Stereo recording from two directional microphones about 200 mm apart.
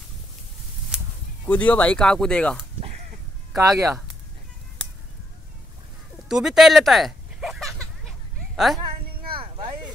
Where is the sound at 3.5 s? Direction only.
15° right (ahead or behind).